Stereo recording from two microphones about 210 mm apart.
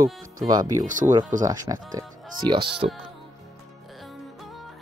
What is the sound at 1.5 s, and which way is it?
Speech, 15° right (ahead or behind).